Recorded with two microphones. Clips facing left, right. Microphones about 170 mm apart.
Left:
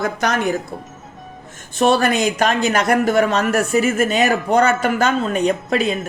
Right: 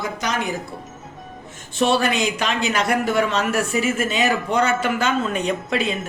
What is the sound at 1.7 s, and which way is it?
Speech, 45° left (ahead or behind).